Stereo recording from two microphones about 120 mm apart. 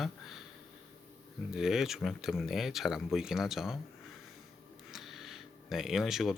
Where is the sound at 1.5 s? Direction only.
5° right (ahead or behind).